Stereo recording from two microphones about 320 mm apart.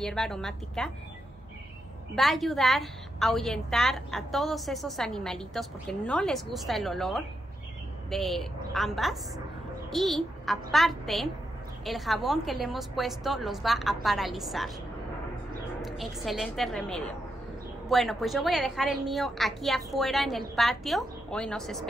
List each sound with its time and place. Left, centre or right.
0.0 s a woman's voice: centre
2.1 s a woman's voice: centre
15.8 s a woman's voice: centre